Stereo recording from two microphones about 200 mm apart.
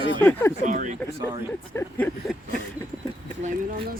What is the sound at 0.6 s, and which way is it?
Speech, 40° right (ahead or behind).